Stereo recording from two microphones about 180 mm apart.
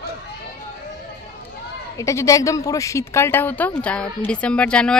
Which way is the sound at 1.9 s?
15° left (ahead or behind).